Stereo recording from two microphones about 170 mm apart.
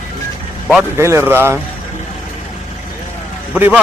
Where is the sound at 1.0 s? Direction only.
15° right (ahead or behind).